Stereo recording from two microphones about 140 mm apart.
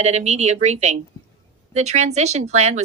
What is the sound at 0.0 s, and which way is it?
Speech, 55° right (ahead or behind).